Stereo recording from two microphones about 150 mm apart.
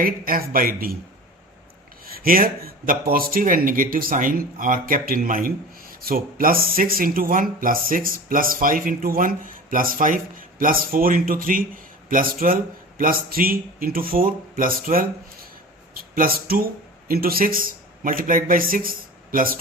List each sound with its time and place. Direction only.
0.0 s speech: 70° right (ahead or behind)
2.1 s speech: 70° right (ahead or behind)
16.1 s a man's voice: 80° right